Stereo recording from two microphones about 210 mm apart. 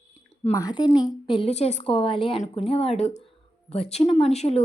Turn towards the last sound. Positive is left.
turn(degrees=30)  # may be behind; listen again after turning